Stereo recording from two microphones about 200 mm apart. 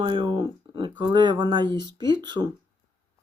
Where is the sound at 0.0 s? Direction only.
25° right (ahead or behind).